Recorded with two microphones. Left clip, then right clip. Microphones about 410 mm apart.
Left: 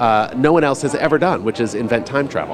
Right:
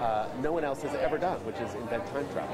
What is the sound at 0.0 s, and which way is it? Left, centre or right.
Speech, left.